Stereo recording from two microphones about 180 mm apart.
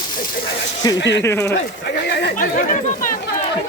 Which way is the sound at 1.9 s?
65° left (ahead or behind).